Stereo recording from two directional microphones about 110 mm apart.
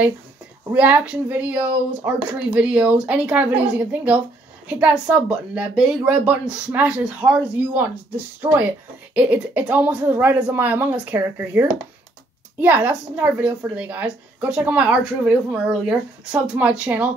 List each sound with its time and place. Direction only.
0.7 s a woman's voice: 15° right (ahead or behind)